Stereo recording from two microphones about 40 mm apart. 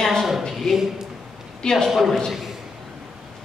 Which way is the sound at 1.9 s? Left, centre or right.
Centre.